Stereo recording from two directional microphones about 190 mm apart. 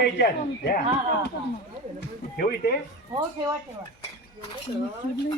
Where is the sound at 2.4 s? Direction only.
50° left (ahead or behind).